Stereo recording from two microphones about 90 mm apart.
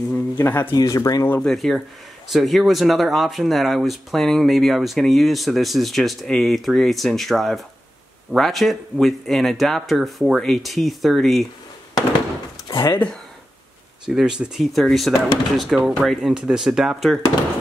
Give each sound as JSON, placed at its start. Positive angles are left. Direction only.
{"t": 0.4, "sound": "speech", "side_deg": 25}
{"t": 0.7, "sound": "speech", "side_deg": 40}
{"t": 1.4, "sound": "speech", "side_deg": 5}
{"t": 12.6, "sound": "a sound", "side_deg": 35}
{"t": 14.0, "sound": "speech", "side_deg": -5}